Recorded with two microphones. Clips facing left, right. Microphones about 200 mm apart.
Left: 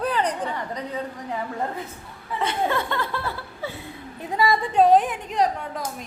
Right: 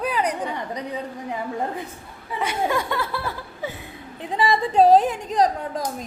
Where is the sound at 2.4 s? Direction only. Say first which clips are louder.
Right 1 dB; 10° right (ahead or behind).